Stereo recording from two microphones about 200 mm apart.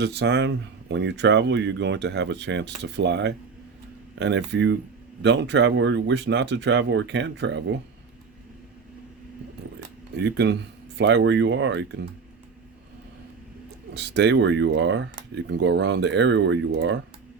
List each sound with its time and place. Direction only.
0.0 s speech: 60° right (ahead or behind)
10.2 s speech: 60° right (ahead or behind)
13.9 s speech: 55° right (ahead or behind)